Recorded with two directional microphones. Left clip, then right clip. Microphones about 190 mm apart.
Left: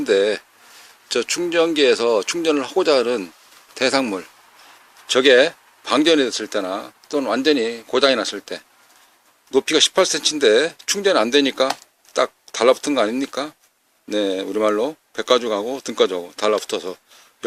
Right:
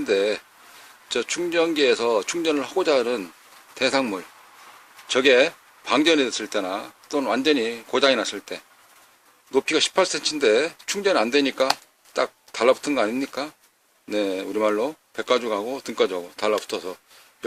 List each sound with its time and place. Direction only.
0.0 s speech: 25° left (ahead or behind)